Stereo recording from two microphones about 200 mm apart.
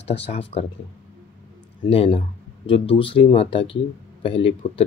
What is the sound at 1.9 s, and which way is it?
Speech, 30° left (ahead or behind).